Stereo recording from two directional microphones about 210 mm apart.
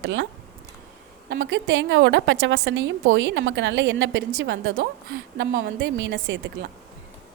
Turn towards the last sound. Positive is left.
turn(degrees=-55)  # may be behind; listen again after turning